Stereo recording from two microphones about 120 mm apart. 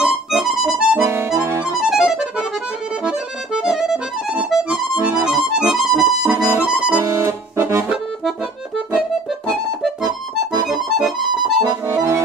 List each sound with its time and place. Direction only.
0.0 s music: 5° right (ahead or behind)
0.9 s music: 20° right (ahead or behind)
1.8 s music: 5° right (ahead or behind)
3.1 s accordion: 5° right (ahead or behind)
6.2 s music: 25° right (ahead or behind)
6.6 s accordion: 5° right (ahead or behind)
7.0 s accordion: 20° right (ahead or behind)
10.7 s music: 5° right (ahead or behind)
11.9 s accordion: 20° right (ahead or behind)